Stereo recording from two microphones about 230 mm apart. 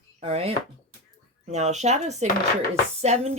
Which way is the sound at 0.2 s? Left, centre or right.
Right.